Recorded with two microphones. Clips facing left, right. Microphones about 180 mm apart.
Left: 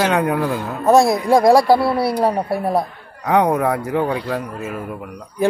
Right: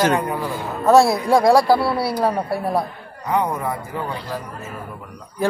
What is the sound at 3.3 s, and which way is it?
A man's voice, 80° left.